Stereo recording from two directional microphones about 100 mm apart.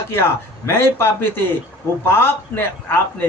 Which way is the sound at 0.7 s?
25° left (ahead or behind).